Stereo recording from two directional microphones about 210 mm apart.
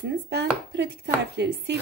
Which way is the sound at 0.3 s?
50° right (ahead or behind).